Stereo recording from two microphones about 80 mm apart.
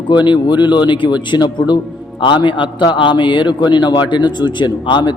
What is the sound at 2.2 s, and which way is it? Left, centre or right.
A man's voice, left.